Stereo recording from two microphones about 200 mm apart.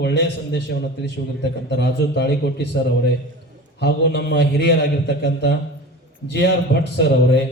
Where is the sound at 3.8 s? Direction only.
60° left (ahead or behind).